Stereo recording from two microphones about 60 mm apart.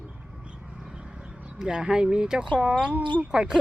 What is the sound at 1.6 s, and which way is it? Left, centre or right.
Speech, centre.